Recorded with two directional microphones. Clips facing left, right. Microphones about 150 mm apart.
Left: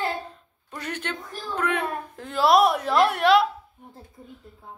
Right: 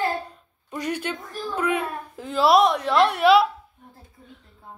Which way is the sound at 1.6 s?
5° right (ahead or behind).